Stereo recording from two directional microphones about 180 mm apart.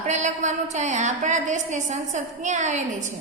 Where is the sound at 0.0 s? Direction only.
40° right (ahead or behind).